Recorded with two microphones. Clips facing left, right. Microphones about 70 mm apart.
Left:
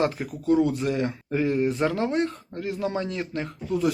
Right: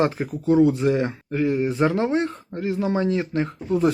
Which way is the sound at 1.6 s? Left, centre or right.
Right.